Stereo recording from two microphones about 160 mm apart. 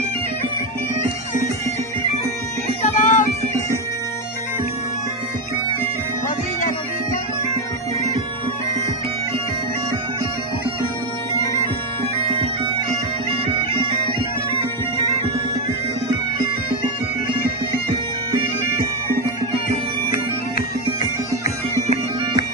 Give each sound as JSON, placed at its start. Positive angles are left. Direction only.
{"t": 2.8, "sound": "music", "side_deg": 55}